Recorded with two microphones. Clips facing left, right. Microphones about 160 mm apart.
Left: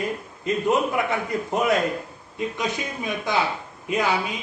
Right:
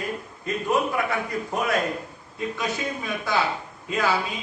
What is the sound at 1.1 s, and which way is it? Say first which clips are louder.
A man's voice: left 2 dB; 20° left (ahead or behind).